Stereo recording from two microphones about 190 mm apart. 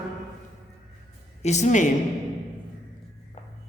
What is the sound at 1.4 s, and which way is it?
Speech, 35° left (ahead or behind).